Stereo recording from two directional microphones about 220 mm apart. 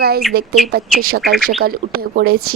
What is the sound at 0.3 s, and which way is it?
Speech, 45° right (ahead or behind).